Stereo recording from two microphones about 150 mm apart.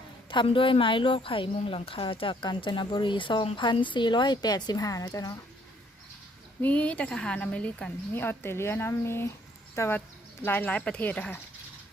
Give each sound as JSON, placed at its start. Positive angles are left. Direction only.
{"t": 0.3, "sound": "speech", "side_deg": 35}
{"t": 6.6, "sound": "a woman's voice", "side_deg": 10}